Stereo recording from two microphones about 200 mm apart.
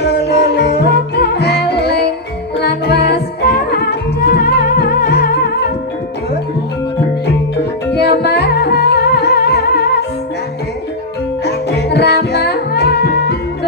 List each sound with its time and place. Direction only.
0.0 s music: 55° left (ahead or behind)
7.9 s music: 55° left (ahead or behind)
11.4 s music: 55° left (ahead or behind)